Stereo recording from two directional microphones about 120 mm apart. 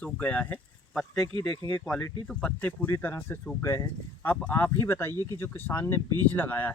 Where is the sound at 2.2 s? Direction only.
10° left (ahead or behind).